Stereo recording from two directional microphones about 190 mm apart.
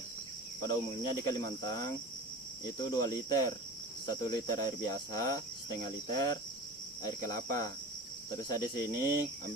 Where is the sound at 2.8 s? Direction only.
20° left (ahead or behind).